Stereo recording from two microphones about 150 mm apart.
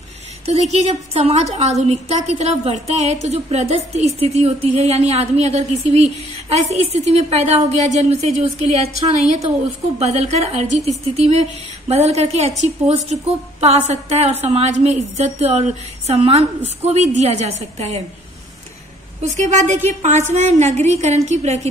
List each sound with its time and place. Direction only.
0.5 s a woman's voice: 45° right (ahead or behind)
19.2 s a woman's voice: 50° right (ahead or behind)